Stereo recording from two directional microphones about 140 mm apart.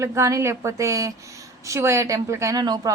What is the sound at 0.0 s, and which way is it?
A woman's voice, 20° right (ahead or behind).